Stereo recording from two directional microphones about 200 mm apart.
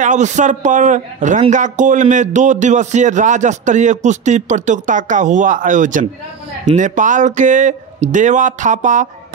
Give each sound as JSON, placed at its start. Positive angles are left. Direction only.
{"t": 0.0, "sound": "a man's voice", "side_deg": -40}